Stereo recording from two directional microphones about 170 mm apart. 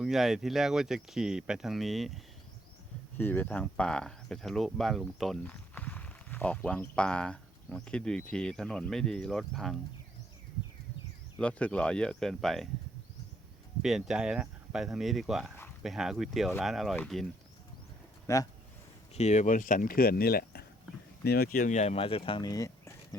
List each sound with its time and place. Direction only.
0.0 s speech: centre (ahead or behind)
3.2 s speech: 10° left (ahead or behind)
11.3 s speech: 5° left (ahead or behind)
13.8 s speech: centre (ahead or behind)
18.3 s speech: 15° left (ahead or behind)
19.1 s speech: 40° left (ahead or behind); by 23.0 s 20° left (ahead or behind)